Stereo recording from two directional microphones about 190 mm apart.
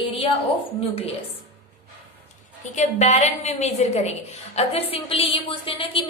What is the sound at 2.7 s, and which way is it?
A woman's voice, 40° left (ahead or behind).